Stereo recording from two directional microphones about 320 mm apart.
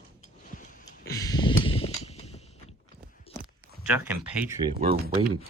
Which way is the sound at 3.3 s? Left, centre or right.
Right.